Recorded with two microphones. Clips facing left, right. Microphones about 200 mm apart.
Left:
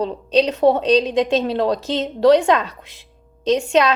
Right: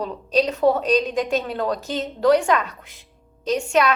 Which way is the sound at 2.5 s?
30° left (ahead or behind).